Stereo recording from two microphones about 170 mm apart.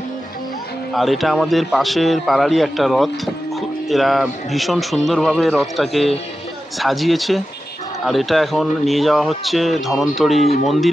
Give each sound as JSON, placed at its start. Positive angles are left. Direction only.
{"t": 0.9, "sound": "speech", "side_deg": 0}